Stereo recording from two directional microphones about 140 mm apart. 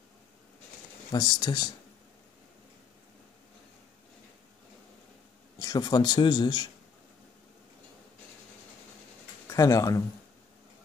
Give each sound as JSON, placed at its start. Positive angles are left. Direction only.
{"t": 1.1, "sound": "a man's voice", "side_deg": 30}
{"t": 5.6, "sound": "a man's voice", "side_deg": 30}
{"t": 9.5, "sound": "speech", "side_deg": 25}